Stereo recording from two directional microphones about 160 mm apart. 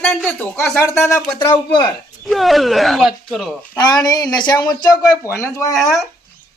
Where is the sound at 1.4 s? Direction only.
25° left (ahead or behind).